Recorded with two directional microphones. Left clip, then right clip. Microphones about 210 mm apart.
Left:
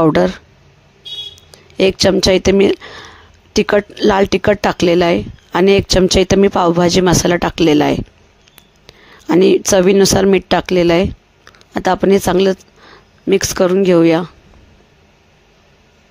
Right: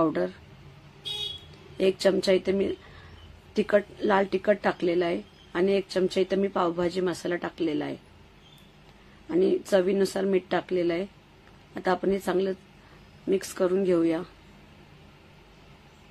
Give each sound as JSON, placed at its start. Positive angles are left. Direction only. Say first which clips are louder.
{"t": 0.0, "sound": "speech", "louder": "left 14 dB", "side_deg": 45}
{"t": 1.8, "sound": "speech", "louder": "left 11 dB", "side_deg": 45}
{"t": 9.3, "sound": "speech", "louder": "left 13 dB", "side_deg": 50}